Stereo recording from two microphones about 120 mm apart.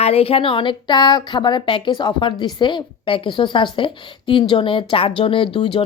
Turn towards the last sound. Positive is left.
turn(degrees=50)  # may be behind; listen again after turning